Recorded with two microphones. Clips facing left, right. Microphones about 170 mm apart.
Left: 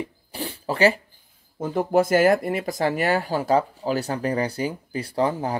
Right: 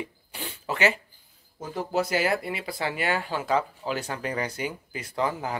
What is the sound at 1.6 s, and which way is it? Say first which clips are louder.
Speech: left 7 dB; 50° left (ahead or behind).